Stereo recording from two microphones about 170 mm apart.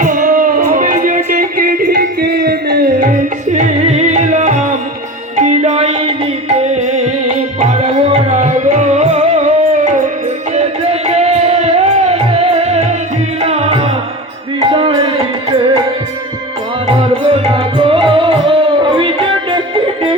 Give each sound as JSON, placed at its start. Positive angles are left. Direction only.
{"t": 0.0, "sound": "music", "side_deg": -55}
{"t": 16.8, "sound": "music", "side_deg": -30}